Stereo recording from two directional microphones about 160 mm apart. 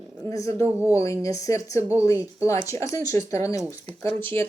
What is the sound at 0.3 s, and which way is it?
A woman's voice, 20° left (ahead or behind).